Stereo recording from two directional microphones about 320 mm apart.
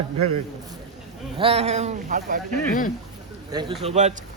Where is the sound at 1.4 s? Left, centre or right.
Centre.